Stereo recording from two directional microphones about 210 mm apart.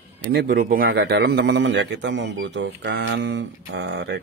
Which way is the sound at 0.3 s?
45° right (ahead or behind).